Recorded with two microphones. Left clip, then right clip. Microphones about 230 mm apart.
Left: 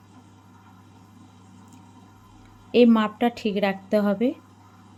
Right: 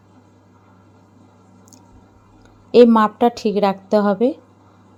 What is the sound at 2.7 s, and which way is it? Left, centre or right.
Speech, right.